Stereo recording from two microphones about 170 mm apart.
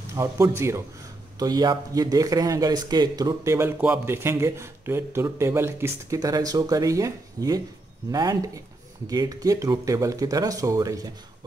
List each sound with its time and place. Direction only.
0.1 s speech: 15° right (ahead or behind)